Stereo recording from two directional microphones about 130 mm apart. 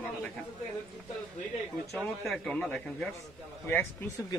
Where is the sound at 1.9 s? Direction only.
5° left (ahead or behind).